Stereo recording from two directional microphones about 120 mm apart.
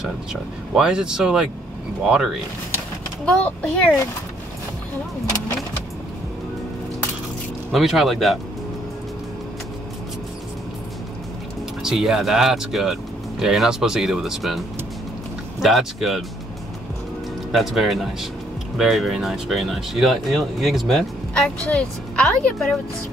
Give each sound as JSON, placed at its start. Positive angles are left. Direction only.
{"t": 0.0, "sound": "speech", "side_deg": -5}
{"t": 3.3, "sound": "speech", "side_deg": 10}
{"t": 7.7, "sound": "speech", "side_deg": -5}
{"t": 11.8, "sound": "speech", "side_deg": -5}
{"t": 15.6, "sound": "speech", "side_deg": 0}
{"t": 17.5, "sound": "speech", "side_deg": 0}